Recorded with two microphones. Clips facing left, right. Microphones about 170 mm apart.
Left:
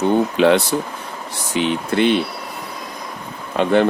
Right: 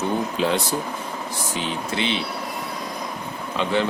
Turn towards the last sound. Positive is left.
turn(degrees=55)  # may be behind; listen again after turning